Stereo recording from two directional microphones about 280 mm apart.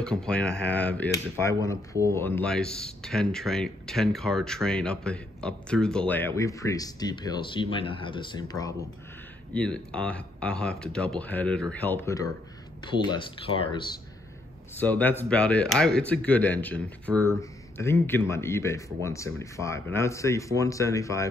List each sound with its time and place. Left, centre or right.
0.0 s speech: centre
14.8 s speech: centre